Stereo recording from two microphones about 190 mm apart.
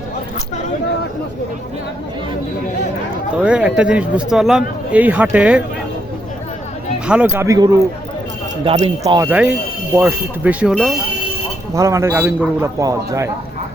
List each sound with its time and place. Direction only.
3.3 s a man's voice: 5° right (ahead or behind)
7.1 s a man's voice: 10° right (ahead or behind)
8.6 s speech: 35° right (ahead or behind)
9.0 s speech: 20° right (ahead or behind)
9.3 s a man's voice: 10° right (ahead or behind)